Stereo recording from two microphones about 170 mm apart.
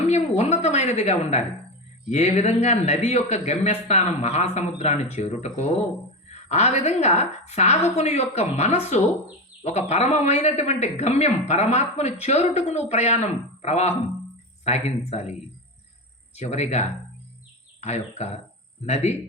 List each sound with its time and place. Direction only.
0.1 s a woman's voice: 40° left (ahead or behind)